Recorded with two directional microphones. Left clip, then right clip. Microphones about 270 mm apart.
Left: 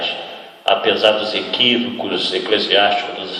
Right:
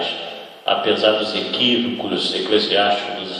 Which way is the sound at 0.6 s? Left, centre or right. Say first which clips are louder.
Left 3 dB; left.